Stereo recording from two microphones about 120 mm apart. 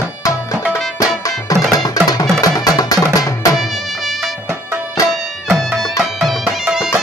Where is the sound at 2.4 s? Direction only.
30° left (ahead or behind).